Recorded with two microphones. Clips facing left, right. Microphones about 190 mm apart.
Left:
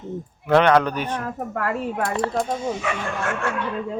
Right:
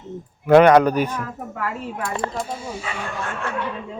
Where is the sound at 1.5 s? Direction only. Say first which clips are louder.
Left 4 dB; 60° left (ahead or behind).